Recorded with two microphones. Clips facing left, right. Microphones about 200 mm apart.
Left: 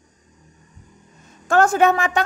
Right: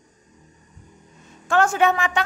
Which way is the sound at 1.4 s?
40° left (ahead or behind).